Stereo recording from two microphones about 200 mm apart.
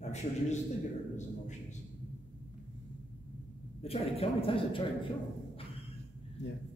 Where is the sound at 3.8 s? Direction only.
30° left (ahead or behind).